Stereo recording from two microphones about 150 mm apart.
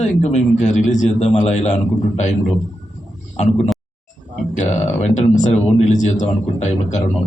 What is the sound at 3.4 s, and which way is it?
Speech, 50° left (ahead or behind).